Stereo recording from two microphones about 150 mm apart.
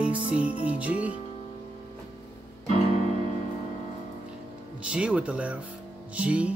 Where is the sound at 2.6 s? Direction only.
40° right (ahead or behind).